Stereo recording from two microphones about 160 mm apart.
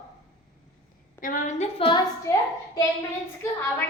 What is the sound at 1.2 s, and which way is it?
Speech, 50° left (ahead or behind).